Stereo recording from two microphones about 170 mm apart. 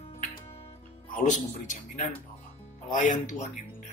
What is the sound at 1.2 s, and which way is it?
Speech, 45° left (ahead or behind).